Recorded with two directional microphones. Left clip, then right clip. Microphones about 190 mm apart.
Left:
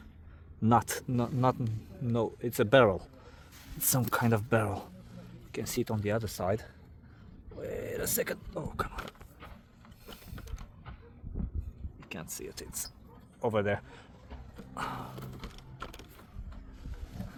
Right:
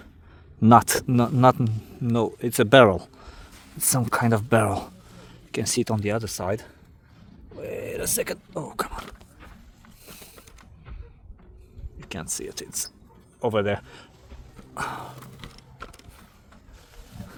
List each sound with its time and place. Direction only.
0.6 s speech: 55° right (ahead or behind)
3.5 s speech: 30° right (ahead or behind)
7.6 s a sound: 30° right (ahead or behind)
8.5 s speech: 55° right (ahead or behind)
11.9 s speech: 50° right (ahead or behind)